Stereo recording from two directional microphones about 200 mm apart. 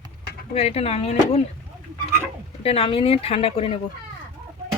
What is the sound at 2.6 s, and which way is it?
Speech, 30° left (ahead or behind).